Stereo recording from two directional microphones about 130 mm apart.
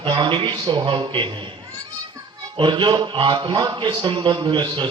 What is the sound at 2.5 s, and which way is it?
A man's voice, 35° right (ahead or behind).